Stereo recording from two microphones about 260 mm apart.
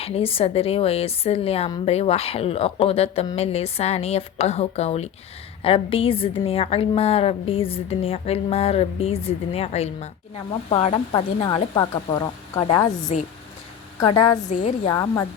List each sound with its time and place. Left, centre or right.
0.0 s a woman's voice: left